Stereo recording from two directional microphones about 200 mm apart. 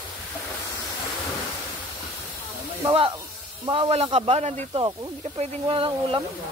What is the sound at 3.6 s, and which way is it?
Speech, 25° right (ahead or behind).